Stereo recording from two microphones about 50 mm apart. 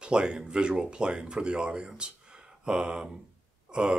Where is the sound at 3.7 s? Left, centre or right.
Right.